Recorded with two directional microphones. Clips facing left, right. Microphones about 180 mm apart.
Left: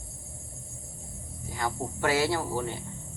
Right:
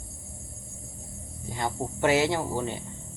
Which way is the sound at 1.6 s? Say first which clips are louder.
Right 3 dB; 25° right (ahead or behind).